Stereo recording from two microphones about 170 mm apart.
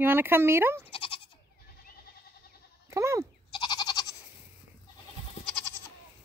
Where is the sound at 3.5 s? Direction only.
25° left (ahead or behind).